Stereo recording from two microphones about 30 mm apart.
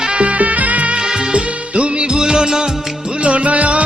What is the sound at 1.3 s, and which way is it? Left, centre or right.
Music of bollywood, right.